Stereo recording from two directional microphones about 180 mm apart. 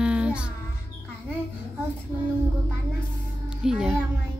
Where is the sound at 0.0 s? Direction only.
5° right (ahead or behind).